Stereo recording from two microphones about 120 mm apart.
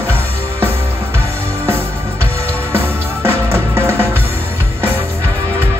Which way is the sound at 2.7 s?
20° right (ahead or behind).